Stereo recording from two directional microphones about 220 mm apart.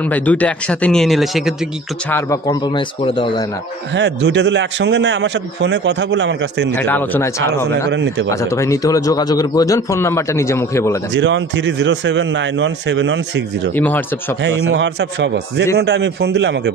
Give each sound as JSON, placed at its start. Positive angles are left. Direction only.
{"t": 0.0, "sound": "speech", "side_deg": 5}
{"t": 2.0, "sound": "speech", "side_deg": 10}
{"t": 3.9, "sound": "a man's voice", "side_deg": -55}
{"t": 6.7, "sound": "a man's voice", "side_deg": 10}
{"t": 7.9, "sound": "speech", "side_deg": -55}
{"t": 8.3, "sound": "a man's voice", "side_deg": 15}
{"t": 11.1, "sound": "speech", "side_deg": -55}
{"t": 13.7, "sound": "a man's voice", "side_deg": 10}
{"t": 14.4, "sound": "a man's voice", "side_deg": -55}